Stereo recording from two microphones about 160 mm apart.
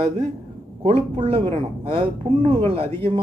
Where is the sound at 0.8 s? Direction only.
35° right (ahead or behind).